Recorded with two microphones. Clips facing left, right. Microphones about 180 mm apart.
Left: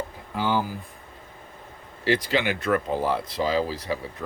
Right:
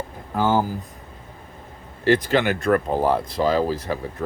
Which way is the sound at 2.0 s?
50° right (ahead or behind).